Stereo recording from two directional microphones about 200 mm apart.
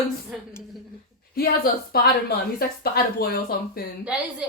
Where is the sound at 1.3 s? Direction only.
50° left (ahead or behind).